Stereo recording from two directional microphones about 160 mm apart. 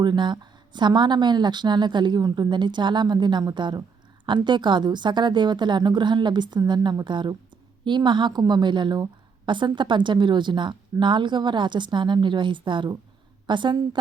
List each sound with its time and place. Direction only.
0.0 s speech: 30° right (ahead or behind)